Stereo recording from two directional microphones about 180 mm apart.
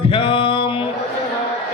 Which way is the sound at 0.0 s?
30° left (ahead or behind).